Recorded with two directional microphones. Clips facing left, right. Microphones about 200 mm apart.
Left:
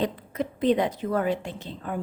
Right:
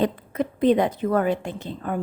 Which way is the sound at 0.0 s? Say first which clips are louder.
Right 4 dB; 55° right (ahead or behind).